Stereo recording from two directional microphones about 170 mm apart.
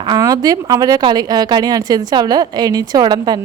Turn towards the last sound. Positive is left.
turn(degrees=-25)  # may be behind; listen again after turning